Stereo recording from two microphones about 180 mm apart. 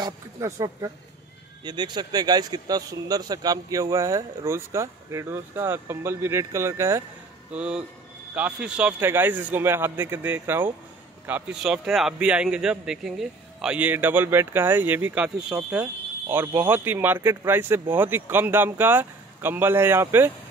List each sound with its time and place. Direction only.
0.0 s a man's voice: 15° right (ahead or behind)